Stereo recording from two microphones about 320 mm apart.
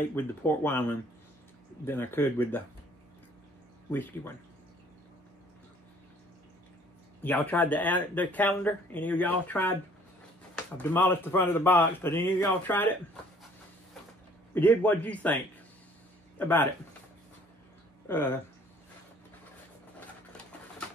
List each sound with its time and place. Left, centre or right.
0.1 s speech: centre
3.9 s speech: centre
7.2 s speech: centre
10.8 s speech: centre
14.5 s speech: centre
18.0 s speech: centre